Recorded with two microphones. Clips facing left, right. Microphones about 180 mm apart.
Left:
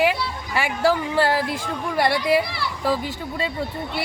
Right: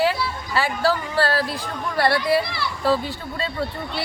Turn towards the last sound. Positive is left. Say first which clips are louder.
# even
turn(degrees=15)  # may be behind; listen again after turning